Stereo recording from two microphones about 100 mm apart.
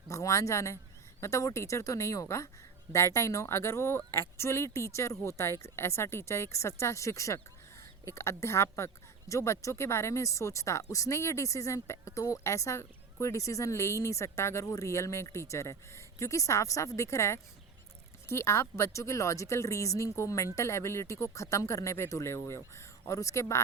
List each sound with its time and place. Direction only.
0.1 s speech: 30° left (ahead or behind)